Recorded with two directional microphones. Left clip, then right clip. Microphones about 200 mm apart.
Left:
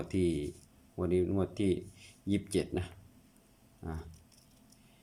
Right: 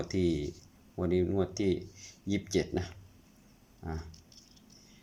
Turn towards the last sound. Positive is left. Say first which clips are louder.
# right 2 dB
turn(degrees=5)  # may be behind; listen again after turning